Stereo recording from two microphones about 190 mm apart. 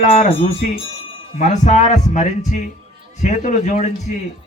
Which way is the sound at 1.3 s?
40° left (ahead or behind).